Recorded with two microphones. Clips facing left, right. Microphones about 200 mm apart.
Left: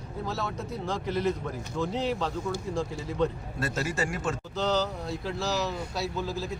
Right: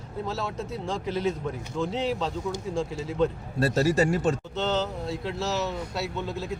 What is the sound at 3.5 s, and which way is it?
Speech, 35° right (ahead or behind).